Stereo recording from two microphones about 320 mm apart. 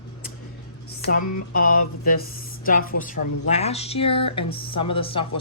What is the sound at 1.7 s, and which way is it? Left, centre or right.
A woman's voice, left.